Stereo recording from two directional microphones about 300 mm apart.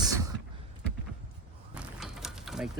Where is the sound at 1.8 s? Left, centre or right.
Centre.